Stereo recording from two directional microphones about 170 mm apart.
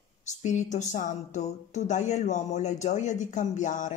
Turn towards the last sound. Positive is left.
turn(degrees=45)  # may be behind; listen again after turning